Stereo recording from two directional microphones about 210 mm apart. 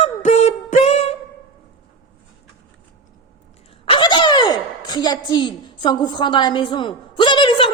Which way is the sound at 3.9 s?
20° left (ahead or behind).